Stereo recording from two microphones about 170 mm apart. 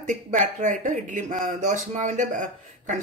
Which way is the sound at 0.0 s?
50° right (ahead or behind).